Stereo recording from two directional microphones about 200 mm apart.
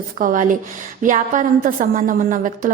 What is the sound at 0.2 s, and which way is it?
A woman's voice, 40° right (ahead or behind).